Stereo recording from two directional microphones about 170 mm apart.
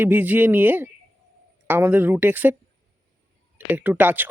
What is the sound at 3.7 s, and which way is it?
Speech, 10° right (ahead or behind).